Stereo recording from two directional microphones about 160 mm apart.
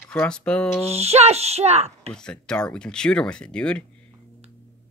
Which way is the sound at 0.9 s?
40° right (ahead or behind).